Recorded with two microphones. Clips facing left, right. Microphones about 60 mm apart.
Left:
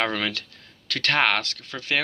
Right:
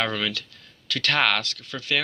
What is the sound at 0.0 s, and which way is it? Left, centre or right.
Speech, left.